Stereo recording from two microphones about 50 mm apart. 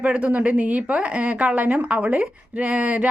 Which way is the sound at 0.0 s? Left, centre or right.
Right.